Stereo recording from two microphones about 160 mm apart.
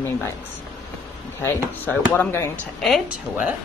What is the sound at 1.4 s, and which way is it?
Speech, 15° left (ahead or behind).